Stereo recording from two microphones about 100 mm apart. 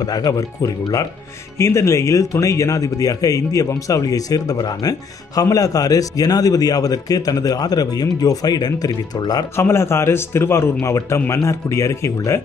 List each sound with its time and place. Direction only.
0.0 s speech: 40° left (ahead or behind)
9.6 s a man's voice: 25° left (ahead or behind)